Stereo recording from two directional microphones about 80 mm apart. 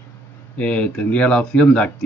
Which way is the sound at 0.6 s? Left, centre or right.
Centre.